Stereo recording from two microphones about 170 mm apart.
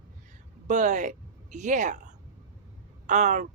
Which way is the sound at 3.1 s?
45° right (ahead or behind).